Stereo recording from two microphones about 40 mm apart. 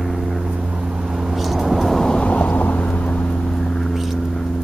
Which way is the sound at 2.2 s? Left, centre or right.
Left.